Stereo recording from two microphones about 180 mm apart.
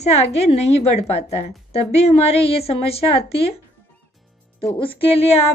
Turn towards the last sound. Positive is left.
turn(degrees=35)  # may be behind; listen again after turning